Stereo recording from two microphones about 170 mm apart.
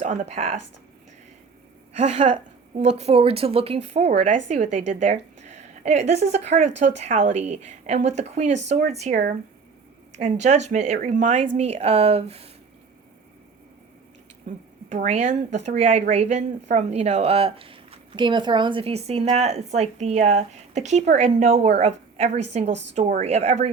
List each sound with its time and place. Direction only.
0.0 s speech: 40° right (ahead or behind)
1.9 s a woman's voice: 40° right (ahead or behind)
14.8 s speech: 45° right (ahead or behind)